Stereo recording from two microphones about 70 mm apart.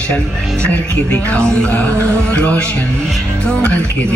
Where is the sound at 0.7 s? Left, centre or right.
Left.